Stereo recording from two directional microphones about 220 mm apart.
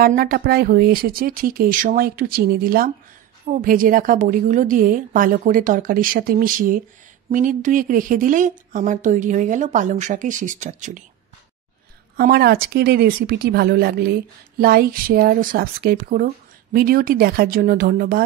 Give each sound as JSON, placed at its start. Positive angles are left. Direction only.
{"t": 0.0, "sound": "speech", "side_deg": -40}
{"t": 12.2, "sound": "speech", "side_deg": -45}